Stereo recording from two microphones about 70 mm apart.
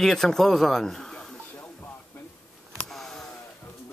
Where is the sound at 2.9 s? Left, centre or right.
Centre.